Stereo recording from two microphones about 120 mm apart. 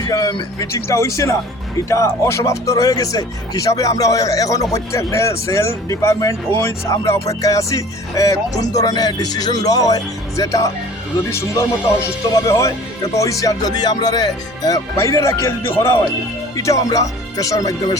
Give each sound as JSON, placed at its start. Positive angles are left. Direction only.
{"t": 0.1, "sound": "speech", "side_deg": 30}